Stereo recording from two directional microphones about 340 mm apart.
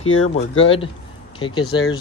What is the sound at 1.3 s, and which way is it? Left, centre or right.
Speech, centre.